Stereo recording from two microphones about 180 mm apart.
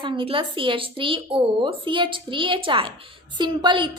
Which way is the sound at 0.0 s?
30° right (ahead or behind).